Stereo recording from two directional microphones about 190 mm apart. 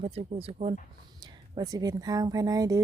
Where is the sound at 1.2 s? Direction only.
20° right (ahead or behind).